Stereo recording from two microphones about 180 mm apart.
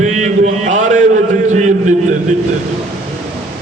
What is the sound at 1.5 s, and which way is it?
Speech, 40° right (ahead or behind).